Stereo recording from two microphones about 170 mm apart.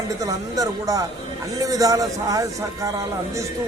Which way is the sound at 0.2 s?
20° right (ahead or behind).